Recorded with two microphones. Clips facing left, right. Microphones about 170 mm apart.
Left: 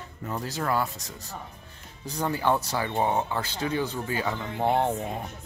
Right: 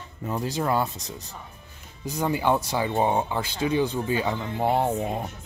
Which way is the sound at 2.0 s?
10° right (ahead or behind).